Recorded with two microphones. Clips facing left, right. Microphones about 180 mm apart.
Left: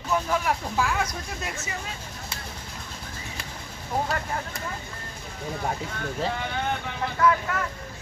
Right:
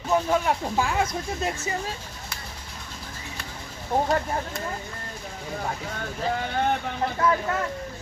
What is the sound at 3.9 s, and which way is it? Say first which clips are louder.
Speech: right 4 dB; 30° right (ahead or behind).